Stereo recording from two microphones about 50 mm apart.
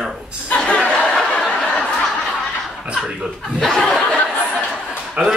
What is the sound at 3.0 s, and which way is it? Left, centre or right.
Speech, centre.